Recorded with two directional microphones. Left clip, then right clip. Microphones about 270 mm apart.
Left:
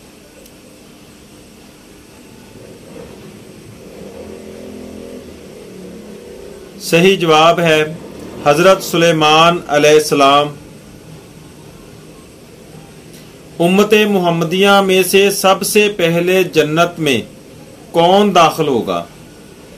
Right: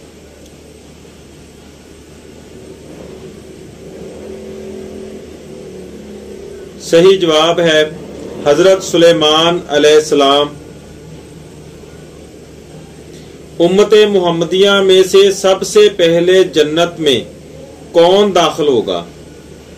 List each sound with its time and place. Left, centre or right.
6.9 s speech: left
13.6 s speech: left
18.2 s speech: left